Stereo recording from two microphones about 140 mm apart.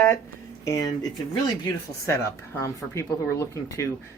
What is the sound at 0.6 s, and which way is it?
Speech, 20° left (ahead or behind).